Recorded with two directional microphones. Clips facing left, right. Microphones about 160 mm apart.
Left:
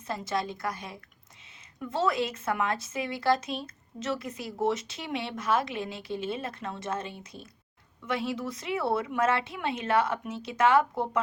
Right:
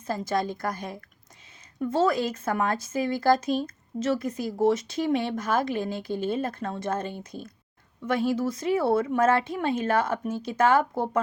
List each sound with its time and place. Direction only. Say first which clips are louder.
0.1 s speech: right 4 dB; 45° right (ahead or behind)